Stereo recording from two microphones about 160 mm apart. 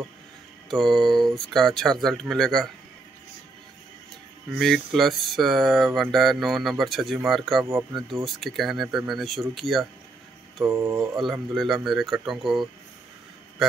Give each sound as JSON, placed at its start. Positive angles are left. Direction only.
{"t": 0.7, "sound": "speech", "side_deg": 5}
{"t": 4.6, "sound": "speech", "side_deg": 5}
{"t": 10.6, "sound": "mantra", "side_deg": -15}
{"t": 11.5, "sound": "speech", "side_deg": 0}